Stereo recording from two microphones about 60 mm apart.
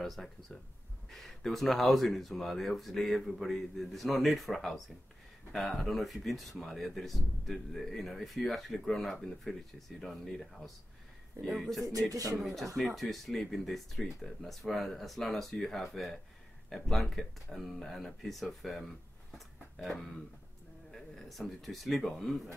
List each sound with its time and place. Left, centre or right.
0.0 s speech: centre
11.9 s speech: right
12.7 s speech: centre
19.3 s a sound: centre
20.9 s speech: centre